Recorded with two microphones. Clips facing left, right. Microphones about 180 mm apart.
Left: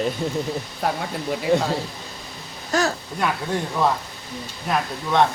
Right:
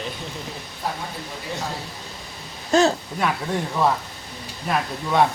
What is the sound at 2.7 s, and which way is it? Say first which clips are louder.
Speech: right 5 dB; 25° right (ahead or behind).